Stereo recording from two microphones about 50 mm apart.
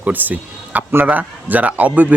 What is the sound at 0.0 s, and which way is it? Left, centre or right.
Speech, right.